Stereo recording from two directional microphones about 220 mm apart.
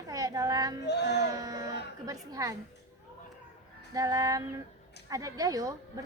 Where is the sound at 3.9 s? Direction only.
15° right (ahead or behind).